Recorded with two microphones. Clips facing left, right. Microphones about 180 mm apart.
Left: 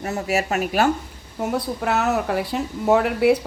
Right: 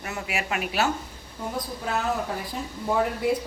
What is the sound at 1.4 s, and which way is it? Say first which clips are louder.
Speech: left 8 dB; 75° left (ahead or behind).